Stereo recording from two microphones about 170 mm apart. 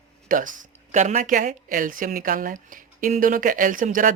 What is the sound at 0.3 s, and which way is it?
Speech, 50° right (ahead or behind).